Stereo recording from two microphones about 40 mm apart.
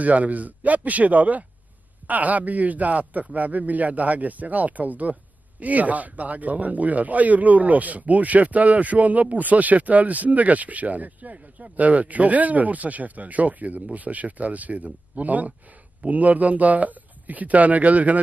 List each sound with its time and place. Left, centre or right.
0.0 s speech: right